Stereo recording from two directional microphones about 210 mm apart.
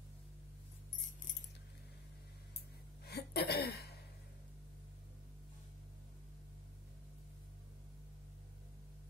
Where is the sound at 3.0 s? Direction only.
50° left (ahead or behind).